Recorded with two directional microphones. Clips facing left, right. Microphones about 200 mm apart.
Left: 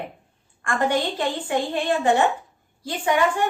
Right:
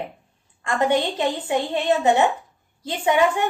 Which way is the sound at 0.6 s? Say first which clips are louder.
Right 2 dB; 20° right (ahead or behind).